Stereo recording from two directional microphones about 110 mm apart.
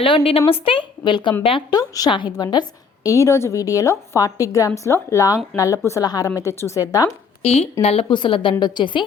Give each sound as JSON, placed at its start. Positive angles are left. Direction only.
{"t": 0.0, "sound": "a woman's voice", "side_deg": 60}
{"t": 1.7, "sound": "a woman's voice", "side_deg": 35}
{"t": 2.0, "sound": "a woman's voice", "side_deg": 45}
{"t": 3.2, "sound": "a woman's voice", "side_deg": 25}
{"t": 7.4, "sound": "a woman's voice", "side_deg": 65}
{"t": 8.1, "sound": "a woman's voice", "side_deg": 50}